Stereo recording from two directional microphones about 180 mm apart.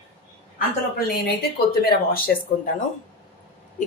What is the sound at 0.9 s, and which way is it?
Speech, 60° left (ahead or behind).